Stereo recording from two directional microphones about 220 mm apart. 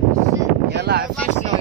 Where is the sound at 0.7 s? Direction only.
45° right (ahead or behind).